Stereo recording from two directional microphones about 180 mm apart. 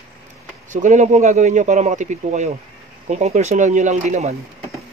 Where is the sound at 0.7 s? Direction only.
40° right (ahead or behind).